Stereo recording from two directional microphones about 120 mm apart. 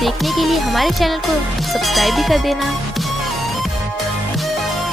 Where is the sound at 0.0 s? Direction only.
Centre (ahead or behind).